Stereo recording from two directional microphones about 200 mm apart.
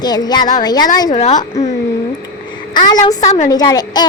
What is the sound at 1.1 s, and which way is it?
Speech, 35° left (ahead or behind).